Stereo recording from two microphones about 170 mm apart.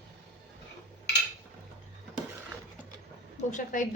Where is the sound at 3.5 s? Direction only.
50° left (ahead or behind).